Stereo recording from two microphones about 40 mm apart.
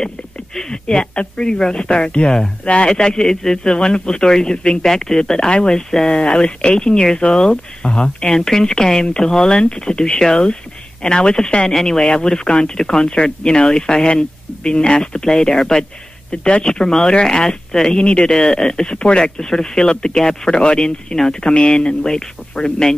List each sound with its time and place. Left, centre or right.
0.6 s speech: centre
8.3 s speech: centre
12.1 s speech: left
16.3 s speech: left
16.6 s speech: centre